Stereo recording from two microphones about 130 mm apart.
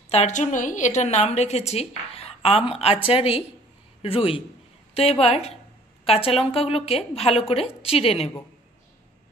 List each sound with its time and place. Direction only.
0.1 s a woman's voice: 60° left (ahead or behind)